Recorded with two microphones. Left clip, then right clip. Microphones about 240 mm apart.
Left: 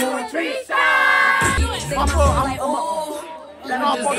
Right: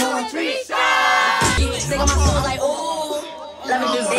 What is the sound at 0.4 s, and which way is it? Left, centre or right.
Music, centre.